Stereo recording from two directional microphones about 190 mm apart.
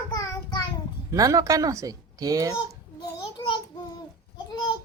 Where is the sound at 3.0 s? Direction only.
20° left (ahead or behind).